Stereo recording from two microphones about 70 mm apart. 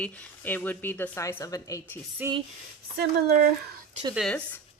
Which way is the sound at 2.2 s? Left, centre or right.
Right.